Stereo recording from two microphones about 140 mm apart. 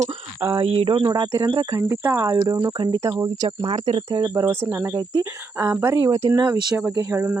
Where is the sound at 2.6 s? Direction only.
35° right (ahead or behind).